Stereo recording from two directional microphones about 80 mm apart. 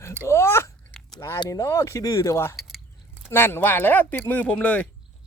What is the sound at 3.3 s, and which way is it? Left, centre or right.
Speech, left.